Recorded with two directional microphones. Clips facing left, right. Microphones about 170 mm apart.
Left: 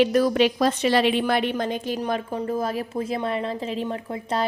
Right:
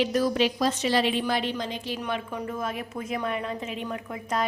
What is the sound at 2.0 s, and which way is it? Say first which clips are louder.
A woman's voice: left 5 dB; 35° left (ahead or behind).